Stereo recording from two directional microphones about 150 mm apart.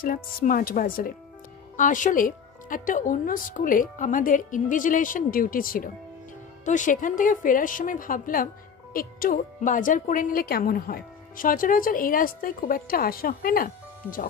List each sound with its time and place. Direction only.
0.0 s a woman's voice: 75° left (ahead or behind)
1.8 s speech: 60° left (ahead or behind)
6.6 s a woman's voice: 55° left (ahead or behind); by 13.7 s 70° left (ahead or behind)